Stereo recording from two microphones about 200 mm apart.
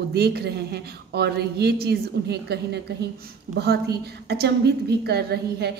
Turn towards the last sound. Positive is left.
turn(degrees=-55)  # may be behind; listen again after turning